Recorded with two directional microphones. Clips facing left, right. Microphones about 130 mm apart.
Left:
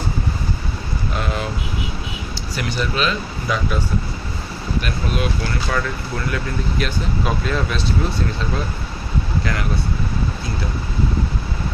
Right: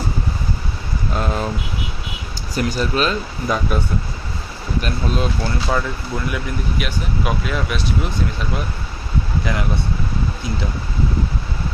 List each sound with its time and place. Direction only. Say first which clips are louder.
2.6 s speech: right 3 dB; 40° right (ahead or behind)
4.8 s speech: right 2 dB; 30° right (ahead or behind)
6.2 s speech: left 2 dB; 15° right (ahead or behind)
9.4 s speech: right 3 dB; 20° right (ahead or behind)